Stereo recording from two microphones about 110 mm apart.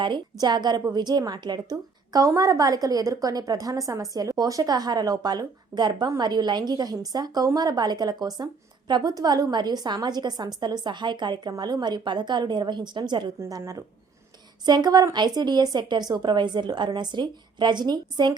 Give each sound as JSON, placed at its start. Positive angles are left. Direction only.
{"t": 0.0, "sound": "a woman's voice", "side_deg": -45}
{"t": 13.4, "sound": "a woman's voice", "side_deg": -35}